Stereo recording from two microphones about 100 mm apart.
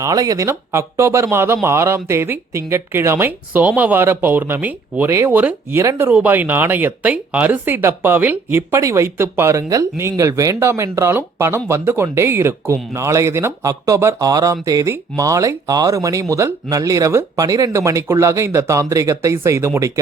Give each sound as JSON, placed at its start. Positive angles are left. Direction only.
{"t": 0.0, "sound": "speech", "side_deg": -35}